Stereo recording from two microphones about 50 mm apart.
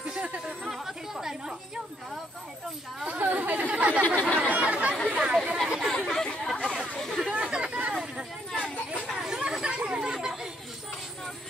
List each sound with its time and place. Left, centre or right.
0.2 s a sound: right
0.7 s chatter: centre
3.1 s chatter: right
4.0 s chatter: left
4.5 s chatter: right
5.9 s chatter: centre
7.2 s chatter: centre
8.5 s a sound: centre
9.1 s chatter: centre